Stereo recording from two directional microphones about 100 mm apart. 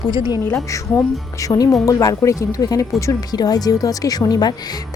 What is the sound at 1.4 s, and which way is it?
A woman's voice, 40° left (ahead or behind).